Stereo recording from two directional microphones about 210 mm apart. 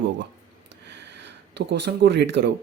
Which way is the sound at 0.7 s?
55° right (ahead or behind).